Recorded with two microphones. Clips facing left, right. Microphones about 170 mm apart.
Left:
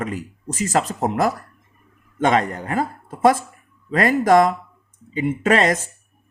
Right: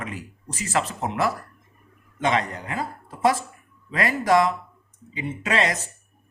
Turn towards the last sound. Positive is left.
turn(degrees=45)  # may be behind; listen again after turning